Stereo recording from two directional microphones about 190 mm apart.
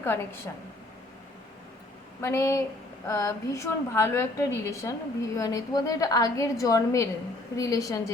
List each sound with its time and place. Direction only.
0.0 s a woman's voice: 10° left (ahead or behind)
2.2 s a woman's voice: 15° left (ahead or behind)